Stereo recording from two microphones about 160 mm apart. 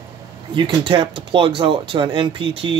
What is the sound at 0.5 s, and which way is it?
Speech, 30° right (ahead or behind).